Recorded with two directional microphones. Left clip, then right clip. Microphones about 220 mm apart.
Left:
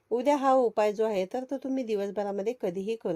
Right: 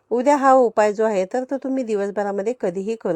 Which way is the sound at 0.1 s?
25° right (ahead or behind).